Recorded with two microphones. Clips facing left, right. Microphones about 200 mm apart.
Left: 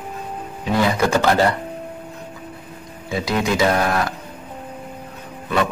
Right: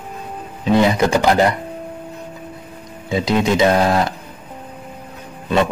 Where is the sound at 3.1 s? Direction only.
20° right (ahead or behind).